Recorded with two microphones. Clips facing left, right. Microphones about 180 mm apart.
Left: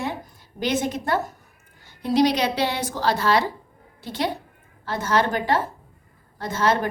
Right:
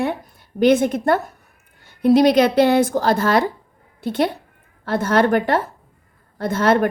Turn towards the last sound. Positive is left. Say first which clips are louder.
# right 5 dB
turn(degrees=-60)  # may be behind; listen again after turning